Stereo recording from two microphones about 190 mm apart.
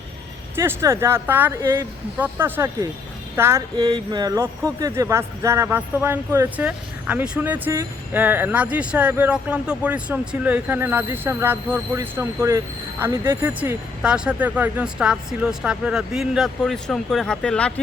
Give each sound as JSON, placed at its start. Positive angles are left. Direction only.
{"t": 0.5, "sound": "speech", "side_deg": -15}